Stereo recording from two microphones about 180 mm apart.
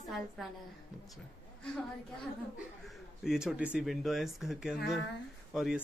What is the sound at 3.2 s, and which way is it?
Speech, 5° right (ahead or behind).